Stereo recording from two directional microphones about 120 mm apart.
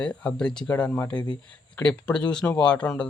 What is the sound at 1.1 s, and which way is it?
Speech, 35° left (ahead or behind).